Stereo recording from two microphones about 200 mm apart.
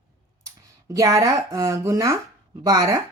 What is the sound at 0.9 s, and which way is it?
Speech, 15° right (ahead or behind).